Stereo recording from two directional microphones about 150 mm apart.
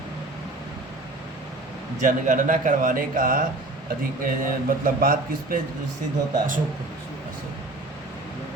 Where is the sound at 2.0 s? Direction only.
60° right (ahead or behind).